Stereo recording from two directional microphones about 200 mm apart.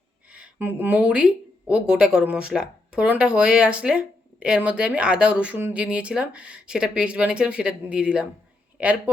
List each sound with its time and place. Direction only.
0.3 s a woman's voice: 5° right (ahead or behind)